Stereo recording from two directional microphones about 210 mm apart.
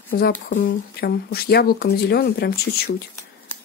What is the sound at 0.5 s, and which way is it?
Speech, 45° left (ahead or behind).